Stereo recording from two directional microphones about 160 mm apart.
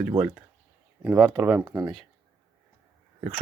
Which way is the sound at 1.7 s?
25° right (ahead or behind).